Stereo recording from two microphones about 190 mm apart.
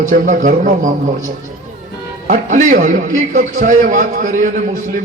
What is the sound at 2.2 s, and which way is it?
A man's voice, 45° right (ahead or behind).